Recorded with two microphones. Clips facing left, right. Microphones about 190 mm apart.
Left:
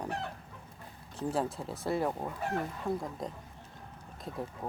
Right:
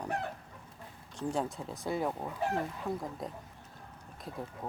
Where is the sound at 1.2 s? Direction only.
5° left (ahead or behind).